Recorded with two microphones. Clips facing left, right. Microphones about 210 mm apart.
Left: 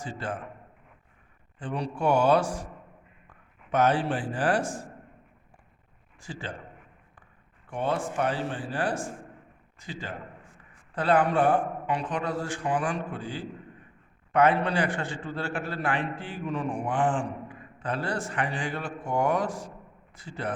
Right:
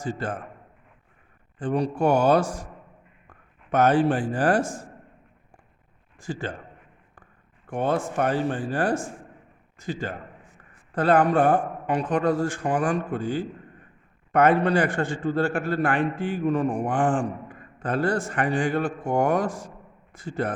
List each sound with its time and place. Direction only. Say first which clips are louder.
0.0 s a man's voice: right 5 dB; 45° right (ahead or behind)
1.5 s a man's voice: right 7 dB; 45° right (ahead or behind)
6.1 s a man's voice: right 6 dB; 50° right (ahead or behind)
7.7 s a man's voice: right 4 dB; 45° right (ahead or behind)